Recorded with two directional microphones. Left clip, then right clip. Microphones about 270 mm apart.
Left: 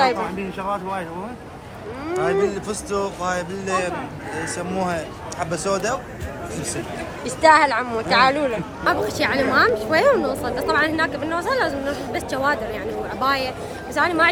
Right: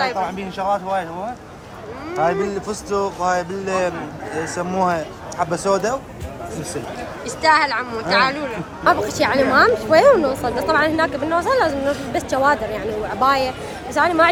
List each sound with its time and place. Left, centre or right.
0.6 s a man's voice: right
2.1 s a man's voice: right
7.3 s a woman's voice: centre